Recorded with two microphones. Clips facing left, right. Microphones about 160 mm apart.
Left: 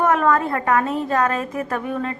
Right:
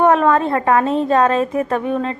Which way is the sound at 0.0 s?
25° right (ahead or behind).